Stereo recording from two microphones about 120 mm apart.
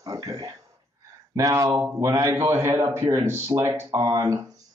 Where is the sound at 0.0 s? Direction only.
30° right (ahead or behind).